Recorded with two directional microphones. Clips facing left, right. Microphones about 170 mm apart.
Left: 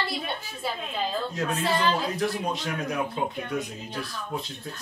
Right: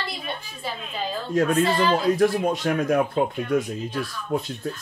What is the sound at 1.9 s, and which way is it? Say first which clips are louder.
Speech: right 8 dB; 50° right (ahead or behind).